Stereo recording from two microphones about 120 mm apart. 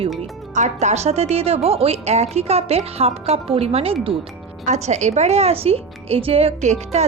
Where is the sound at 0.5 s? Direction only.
80° right; by 4.1 s 55° right (ahead or behind).